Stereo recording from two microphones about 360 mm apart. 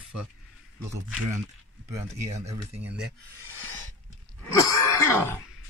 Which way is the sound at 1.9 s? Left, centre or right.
Centre.